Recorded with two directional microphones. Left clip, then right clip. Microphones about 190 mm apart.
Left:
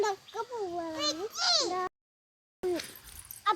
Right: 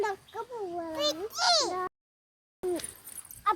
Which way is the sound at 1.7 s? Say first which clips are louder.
Even; 15° right (ahead or behind).